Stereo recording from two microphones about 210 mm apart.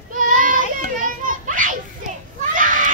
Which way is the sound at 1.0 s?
40° right (ahead or behind).